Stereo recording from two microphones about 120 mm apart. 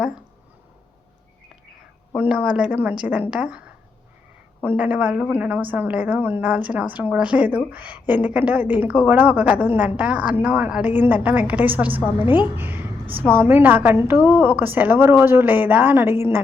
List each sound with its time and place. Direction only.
2.1 s a woman's voice: 10° right (ahead or behind)
4.6 s a woman's voice: 15° right (ahead or behind)